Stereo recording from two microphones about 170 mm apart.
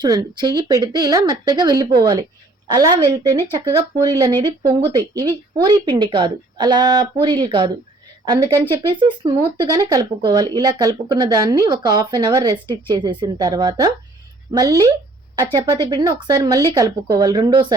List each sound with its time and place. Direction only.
0.0 s a woman's voice: 25° right (ahead or behind)